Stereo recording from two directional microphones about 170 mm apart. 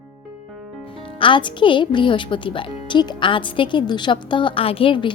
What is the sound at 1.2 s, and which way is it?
A woman's voice, 30° left (ahead or behind).